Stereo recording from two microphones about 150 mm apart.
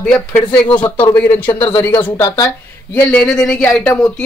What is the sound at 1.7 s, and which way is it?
Speech, 15° left (ahead or behind).